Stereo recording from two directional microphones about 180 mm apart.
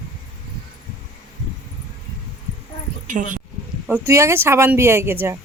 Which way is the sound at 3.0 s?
45° right (ahead or behind).